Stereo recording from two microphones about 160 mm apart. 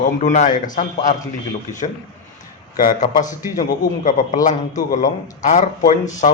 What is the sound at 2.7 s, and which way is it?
A man's voice, 60° left (ahead or behind).